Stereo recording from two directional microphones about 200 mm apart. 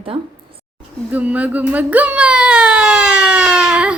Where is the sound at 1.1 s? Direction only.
5° right (ahead or behind).